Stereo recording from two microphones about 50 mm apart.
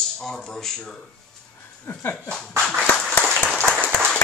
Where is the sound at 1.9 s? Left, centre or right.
Left.